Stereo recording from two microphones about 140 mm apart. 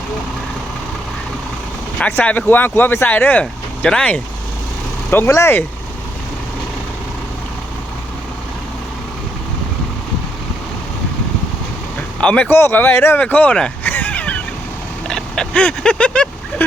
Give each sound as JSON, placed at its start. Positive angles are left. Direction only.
{"t": 2.0, "sound": "speech", "side_deg": 10}
{"t": 5.1, "sound": "speech", "side_deg": 20}
{"t": 12.2, "sound": "speech", "side_deg": 10}
{"t": 15.0, "sound": "a sound", "side_deg": 5}